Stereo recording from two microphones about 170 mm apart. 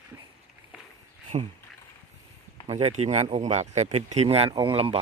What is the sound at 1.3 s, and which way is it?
Speech, 40° right (ahead or behind).